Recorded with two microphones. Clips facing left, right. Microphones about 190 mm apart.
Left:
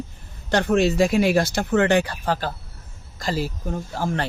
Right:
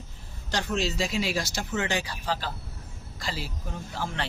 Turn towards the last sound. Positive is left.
turn(degrees=45)  # may be behind; listen again after turning